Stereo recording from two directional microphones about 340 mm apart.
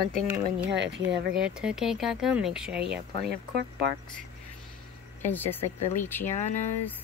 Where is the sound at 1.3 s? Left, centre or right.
Centre.